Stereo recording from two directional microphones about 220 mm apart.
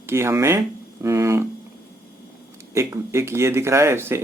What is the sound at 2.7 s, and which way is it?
Speech, 15° right (ahead or behind).